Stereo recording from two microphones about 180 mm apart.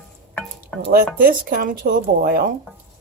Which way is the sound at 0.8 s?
55° right (ahead or behind).